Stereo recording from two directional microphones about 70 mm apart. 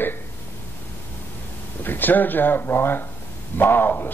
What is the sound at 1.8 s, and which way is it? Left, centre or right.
Speech, left.